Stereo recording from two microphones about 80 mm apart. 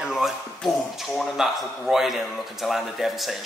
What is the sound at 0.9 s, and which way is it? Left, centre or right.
Speech, centre.